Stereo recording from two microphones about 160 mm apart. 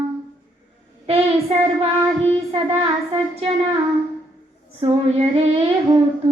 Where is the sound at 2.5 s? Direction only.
35° right (ahead or behind).